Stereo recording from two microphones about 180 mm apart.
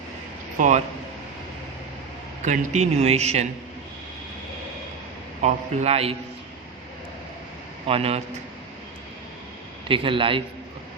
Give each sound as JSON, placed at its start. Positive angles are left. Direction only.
{"t": 0.6, "sound": "speech", "side_deg": -45}
{"t": 2.4, "sound": "speech", "side_deg": -40}
{"t": 5.4, "sound": "speech", "side_deg": -40}
{"t": 7.9, "sound": "speech", "side_deg": -35}
{"t": 9.9, "sound": "a man's voice", "side_deg": -30}